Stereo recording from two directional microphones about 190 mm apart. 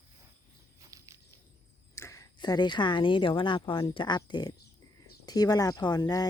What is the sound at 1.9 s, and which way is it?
Speech, 15° left (ahead or behind).